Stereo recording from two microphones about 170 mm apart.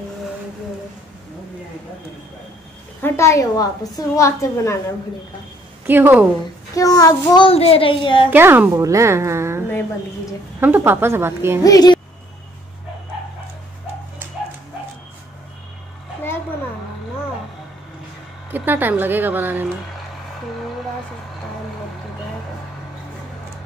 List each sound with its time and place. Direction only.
3.0 s a woman's voice: 15° left (ahead or behind)
5.9 s a woman's voice: 10° right (ahead or behind)
6.7 s a child's voice: 20° left (ahead or behind)
8.3 s a woman's voice: 10° right (ahead or behind)
10.6 s a woman's voice: 10° right (ahead or behind)
11.6 s a child's voice: 20° left (ahead or behind)
18.5 s a woman's voice: 10° right (ahead or behind)